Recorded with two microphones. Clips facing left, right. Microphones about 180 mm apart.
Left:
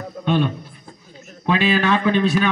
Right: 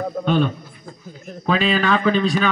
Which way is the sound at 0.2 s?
50° right (ahead or behind).